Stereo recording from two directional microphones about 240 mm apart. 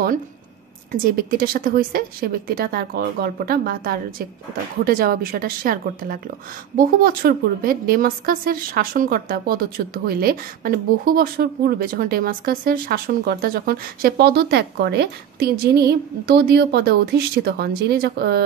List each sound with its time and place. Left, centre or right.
1.0 s a woman's voice: right